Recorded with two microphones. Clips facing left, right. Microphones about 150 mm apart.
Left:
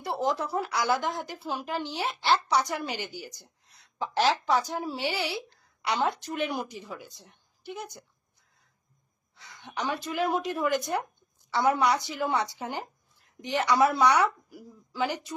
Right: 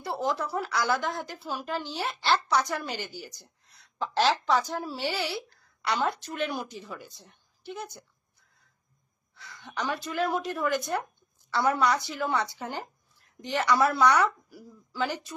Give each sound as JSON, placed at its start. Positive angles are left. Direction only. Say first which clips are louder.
{"t": 0.0, "sound": "a woman's voice", "louder": "left 1 dB", "side_deg": 15}
{"t": 9.3, "sound": "a woman's voice", "louder": "even", "side_deg": 20}